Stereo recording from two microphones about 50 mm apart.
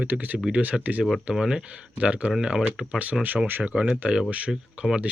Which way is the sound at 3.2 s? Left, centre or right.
Right.